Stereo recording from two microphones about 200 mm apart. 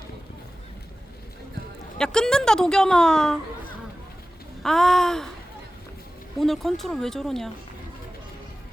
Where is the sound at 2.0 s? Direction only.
5° left (ahead or behind).